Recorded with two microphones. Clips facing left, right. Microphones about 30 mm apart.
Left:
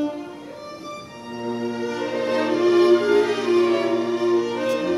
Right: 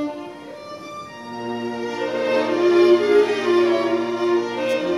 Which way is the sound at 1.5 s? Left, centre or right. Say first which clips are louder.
Even; centre.